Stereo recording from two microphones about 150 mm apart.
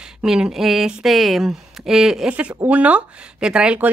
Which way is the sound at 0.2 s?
5° right (ahead or behind).